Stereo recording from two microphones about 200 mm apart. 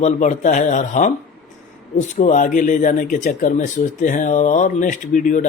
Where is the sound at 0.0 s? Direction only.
40° left (ahead or behind).